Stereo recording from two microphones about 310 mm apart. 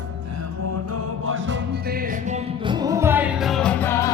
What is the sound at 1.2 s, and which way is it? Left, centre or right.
Music, right.